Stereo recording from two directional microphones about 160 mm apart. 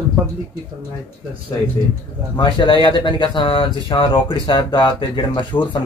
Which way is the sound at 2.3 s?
30° left (ahead or behind).